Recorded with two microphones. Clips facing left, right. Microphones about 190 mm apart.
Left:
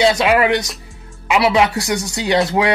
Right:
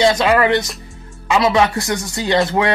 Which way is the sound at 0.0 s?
10° left (ahead or behind).